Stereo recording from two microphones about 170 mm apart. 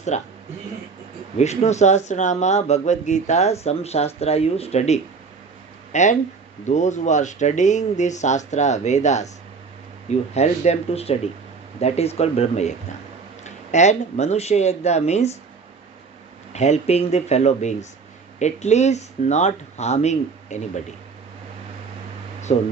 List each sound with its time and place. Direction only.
0.1 s speech: 40° left (ahead or behind)
1.4 s speech: 40° left (ahead or behind)
16.5 s speech: 40° left (ahead or behind)
22.5 s speech: 40° left (ahead or behind)